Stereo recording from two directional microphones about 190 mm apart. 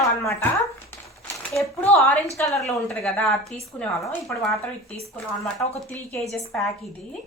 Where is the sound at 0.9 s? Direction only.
15° left (ahead or behind).